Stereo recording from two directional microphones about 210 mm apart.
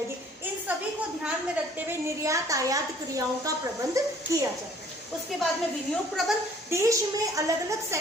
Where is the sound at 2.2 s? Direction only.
15° right (ahead or behind).